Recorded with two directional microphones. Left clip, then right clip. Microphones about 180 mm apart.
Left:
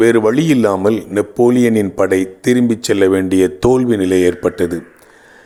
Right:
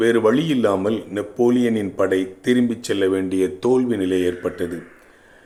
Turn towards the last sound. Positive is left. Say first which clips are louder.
# left 8 dB
turn(degrees=40)  # may be behind; listen again after turning